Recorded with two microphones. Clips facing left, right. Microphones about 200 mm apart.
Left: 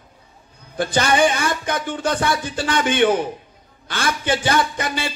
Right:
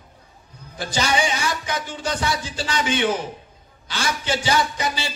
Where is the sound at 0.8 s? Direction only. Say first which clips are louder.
Left 5 dB; 55° left (ahead or behind).